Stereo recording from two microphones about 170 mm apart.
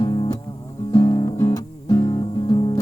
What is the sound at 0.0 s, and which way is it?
Music, 25° left (ahead or behind).